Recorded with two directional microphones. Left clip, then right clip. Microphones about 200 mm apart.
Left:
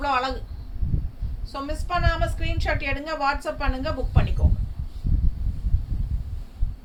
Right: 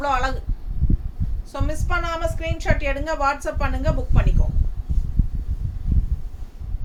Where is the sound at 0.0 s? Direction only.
15° right (ahead or behind).